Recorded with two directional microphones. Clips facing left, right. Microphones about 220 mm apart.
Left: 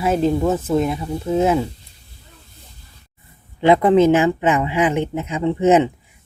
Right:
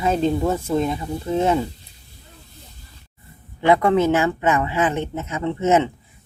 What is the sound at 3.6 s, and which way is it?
Speech, 20° left (ahead or behind).